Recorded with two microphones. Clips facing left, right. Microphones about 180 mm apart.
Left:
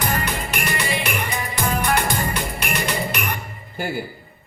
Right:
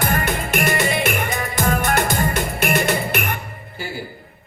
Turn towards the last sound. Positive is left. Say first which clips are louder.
# right 4 dB
turn(degrees=-50)  # may be behind; listen again after turning